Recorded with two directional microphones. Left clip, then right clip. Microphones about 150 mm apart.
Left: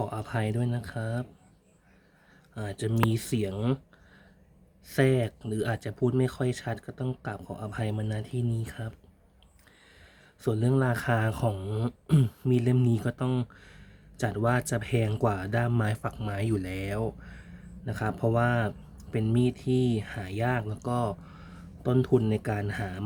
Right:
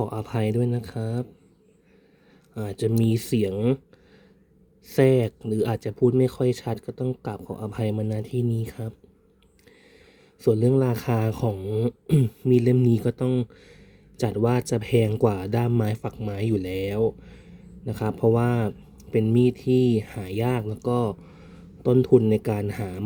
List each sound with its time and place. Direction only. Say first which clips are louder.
0.0 s speech: right 4 dB; 20° right (ahead or behind)
2.6 s speech: right 4 dB; 20° right (ahead or behind)
3.5 s speech: right 7 dB; 10° right (ahead or behind)
4.9 s speech: right 6 dB; 20° right (ahead or behind)
10.4 s speech: right 7 dB; 20° right (ahead or behind)